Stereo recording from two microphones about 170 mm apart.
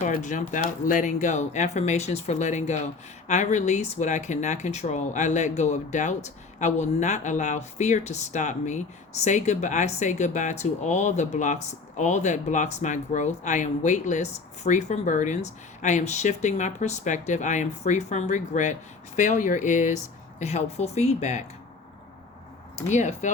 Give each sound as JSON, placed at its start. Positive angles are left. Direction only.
{"t": 0.0, "sound": "speech", "side_deg": 50}
{"t": 22.9, "sound": "speech", "side_deg": 45}